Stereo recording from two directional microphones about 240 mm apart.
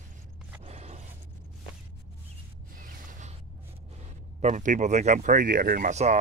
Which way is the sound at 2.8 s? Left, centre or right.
Right.